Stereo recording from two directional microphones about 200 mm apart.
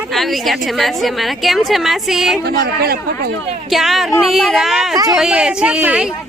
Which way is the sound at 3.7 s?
Centre (ahead or behind).